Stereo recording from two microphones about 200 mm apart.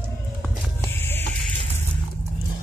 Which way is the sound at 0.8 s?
10° left (ahead or behind).